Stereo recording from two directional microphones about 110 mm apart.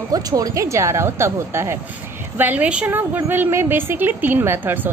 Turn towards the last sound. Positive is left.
turn(degrees=-20)  # may be behind; listen again after turning